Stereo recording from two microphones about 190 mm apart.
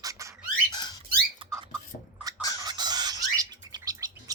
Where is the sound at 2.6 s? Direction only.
20° right (ahead or behind).